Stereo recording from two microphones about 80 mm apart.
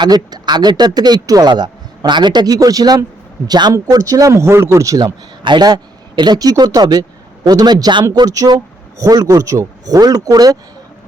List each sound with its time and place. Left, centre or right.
0.0 s speech: right
2.6 s a man's voice: right
4.3 s a man's voice: right
5.0 s a man's voice: right